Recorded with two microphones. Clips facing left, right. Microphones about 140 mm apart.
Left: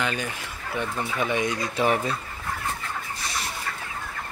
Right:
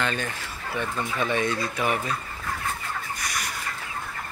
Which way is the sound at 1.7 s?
30° left (ahead or behind).